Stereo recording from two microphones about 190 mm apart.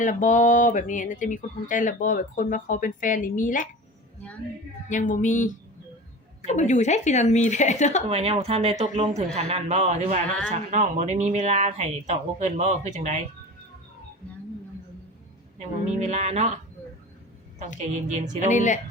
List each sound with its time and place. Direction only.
0.0 s speech: 40° left (ahead or behind)
4.9 s a woman's voice: 45° left (ahead or behind)
6.5 s a woman's voice: 35° left (ahead or behind)
8.0 s speech: 30° right (ahead or behind)
15.5 s speech: 35° right (ahead or behind)
18.4 s a woman's voice: 40° left (ahead or behind)